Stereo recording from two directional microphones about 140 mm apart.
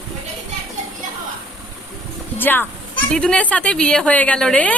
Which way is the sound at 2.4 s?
15° left (ahead or behind).